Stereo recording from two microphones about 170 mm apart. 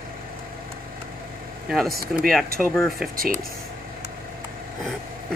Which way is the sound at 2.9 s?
60° right (ahead or behind).